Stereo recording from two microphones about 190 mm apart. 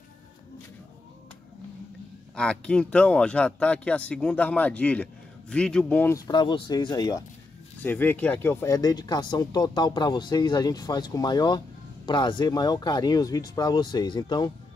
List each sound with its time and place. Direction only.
2.3 s speech: 5° left (ahead or behind); by 7.2 s 20° left (ahead or behind)
7.8 s speech: 10° left (ahead or behind)